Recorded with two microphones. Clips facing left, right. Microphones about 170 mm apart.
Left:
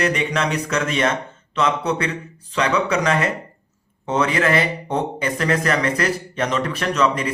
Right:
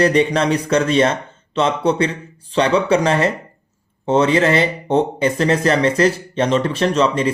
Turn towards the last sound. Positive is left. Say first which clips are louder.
# right 4 dB
turn(degrees=-30)  # may be behind; listen again after turning